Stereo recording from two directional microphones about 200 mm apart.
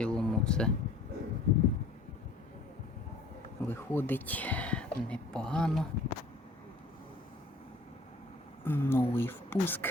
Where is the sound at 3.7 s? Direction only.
10° left (ahead or behind).